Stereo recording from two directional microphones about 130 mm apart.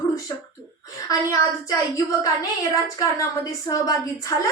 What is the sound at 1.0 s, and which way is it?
Speech, 30° left (ahead or behind).